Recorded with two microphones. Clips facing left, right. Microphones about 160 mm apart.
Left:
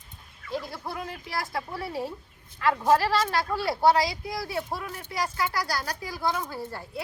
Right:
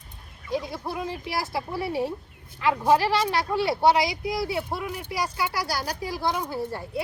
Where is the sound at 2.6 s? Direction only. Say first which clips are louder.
Right 1 dB; 15° right (ahead or behind).